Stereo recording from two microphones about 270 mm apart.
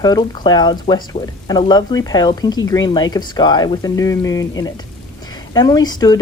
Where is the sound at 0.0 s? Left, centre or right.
Centre.